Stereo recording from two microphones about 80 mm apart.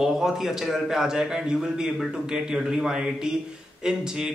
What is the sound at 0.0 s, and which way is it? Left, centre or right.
A man's voice, centre.